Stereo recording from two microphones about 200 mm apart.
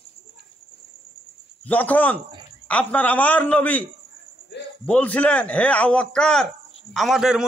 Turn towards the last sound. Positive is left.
turn(degrees=0)  # may be behind; listen again after turning